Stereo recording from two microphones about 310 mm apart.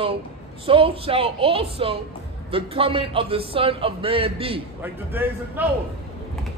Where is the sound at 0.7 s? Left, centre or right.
Centre.